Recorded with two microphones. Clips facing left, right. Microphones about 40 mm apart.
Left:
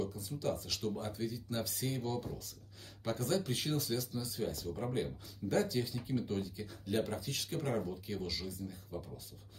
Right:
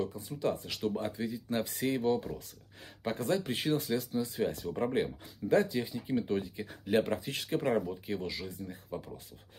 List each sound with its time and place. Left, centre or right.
0.0 s speech: right
5.5 s speech: right
6.5 s speech: right